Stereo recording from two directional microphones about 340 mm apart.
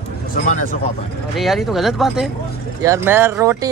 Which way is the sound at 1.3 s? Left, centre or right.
Centre.